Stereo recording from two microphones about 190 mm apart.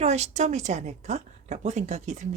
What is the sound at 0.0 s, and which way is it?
A woman's voice, 35° right (ahead or behind).